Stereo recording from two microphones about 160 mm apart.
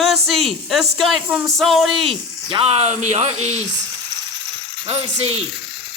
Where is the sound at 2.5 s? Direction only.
35° right (ahead or behind).